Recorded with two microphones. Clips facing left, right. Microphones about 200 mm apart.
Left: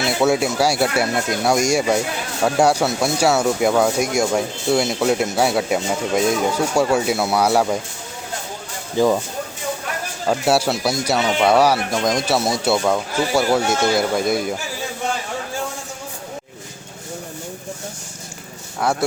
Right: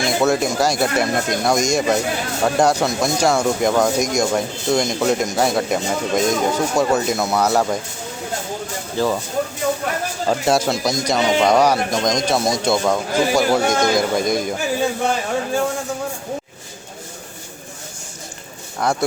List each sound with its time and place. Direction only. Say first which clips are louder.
0.0 s speech: even; 10° left (ahead or behind)
9.0 s speech: left 3 dB; 15° left (ahead or behind)
10.2 s speech: even; 5° left (ahead or behind)
18.8 s speech: even; 5° left (ahead or behind)